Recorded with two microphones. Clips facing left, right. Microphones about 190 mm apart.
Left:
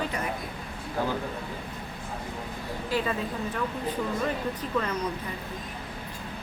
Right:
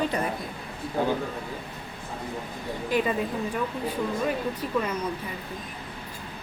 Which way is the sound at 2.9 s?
20° right (ahead or behind).